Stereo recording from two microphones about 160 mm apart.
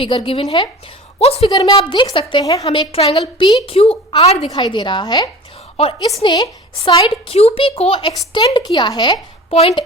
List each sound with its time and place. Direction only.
0.0 s a woman's voice: 35° left (ahead or behind)
1.2 s a woman's voice: 40° left (ahead or behind)
1.7 s a woman's voice: 30° left (ahead or behind)
4.5 s a woman's voice: 25° left (ahead or behind)
5.8 s a woman's voice: 35° left (ahead or behind)